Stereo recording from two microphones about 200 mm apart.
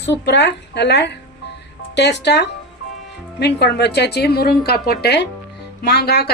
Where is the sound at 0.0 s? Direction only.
60° left (ahead or behind).